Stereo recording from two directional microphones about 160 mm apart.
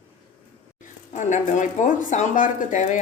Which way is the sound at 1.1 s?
50° left (ahead or behind).